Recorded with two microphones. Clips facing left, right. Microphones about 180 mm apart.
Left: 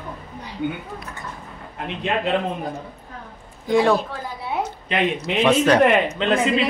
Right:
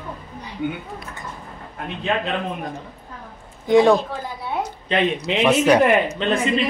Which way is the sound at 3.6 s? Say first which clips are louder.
Right 4 dB; 20° right (ahead or behind).